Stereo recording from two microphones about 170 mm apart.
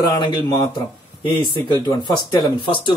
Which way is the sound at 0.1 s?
20° left (ahead or behind).